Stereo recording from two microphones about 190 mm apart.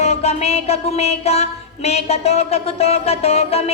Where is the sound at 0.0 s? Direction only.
35° left (ahead or behind).